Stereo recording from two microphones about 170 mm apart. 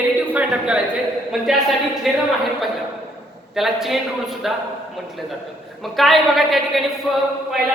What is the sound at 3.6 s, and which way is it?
Speech, centre (ahead or behind).